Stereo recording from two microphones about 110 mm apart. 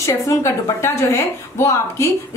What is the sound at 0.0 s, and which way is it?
A woman's voice, 25° left (ahead or behind).